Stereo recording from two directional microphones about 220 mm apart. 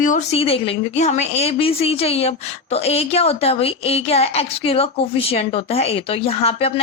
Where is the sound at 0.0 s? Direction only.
35° left (ahead or behind).